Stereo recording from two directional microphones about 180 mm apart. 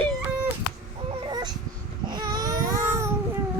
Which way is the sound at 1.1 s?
25° right (ahead or behind).